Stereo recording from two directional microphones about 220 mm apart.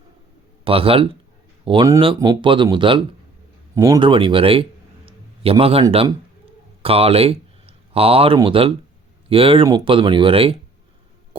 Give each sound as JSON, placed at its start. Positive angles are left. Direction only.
{"t": 0.6, "sound": "a man's voice", "side_deg": -25}